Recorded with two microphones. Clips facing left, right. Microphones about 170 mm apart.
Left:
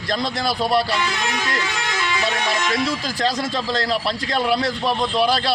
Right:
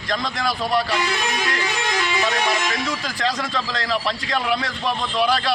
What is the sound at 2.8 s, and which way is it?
A man's voice, 35° left (ahead or behind).